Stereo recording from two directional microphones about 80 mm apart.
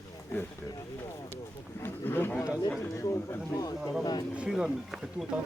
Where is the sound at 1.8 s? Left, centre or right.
Left.